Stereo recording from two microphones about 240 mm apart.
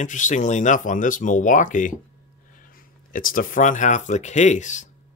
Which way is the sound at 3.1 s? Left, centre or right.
Left.